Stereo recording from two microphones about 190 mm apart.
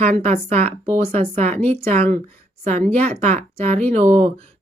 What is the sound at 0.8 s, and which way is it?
Speech, 35° right (ahead or behind).